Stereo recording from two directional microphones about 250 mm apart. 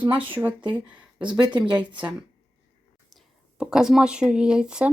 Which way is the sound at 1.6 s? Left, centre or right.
Centre.